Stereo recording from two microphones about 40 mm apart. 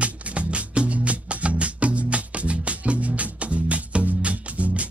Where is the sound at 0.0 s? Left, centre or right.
Right.